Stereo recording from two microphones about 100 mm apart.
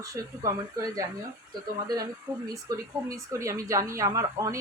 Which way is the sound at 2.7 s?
30° right (ahead or behind).